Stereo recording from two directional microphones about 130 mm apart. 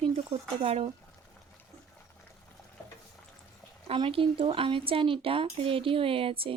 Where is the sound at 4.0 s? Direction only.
45° right (ahead or behind).